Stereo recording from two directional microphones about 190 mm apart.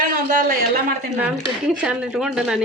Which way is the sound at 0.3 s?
45° right (ahead or behind).